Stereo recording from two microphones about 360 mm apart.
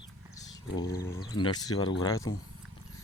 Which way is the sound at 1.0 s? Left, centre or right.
Centre.